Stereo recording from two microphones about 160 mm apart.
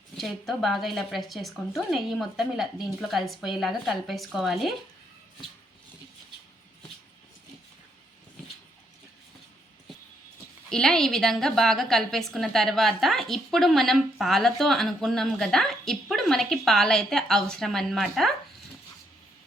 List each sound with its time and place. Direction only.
0.2 s a woman's voice: centre (ahead or behind)
10.7 s a woman's voice: 5° left (ahead or behind)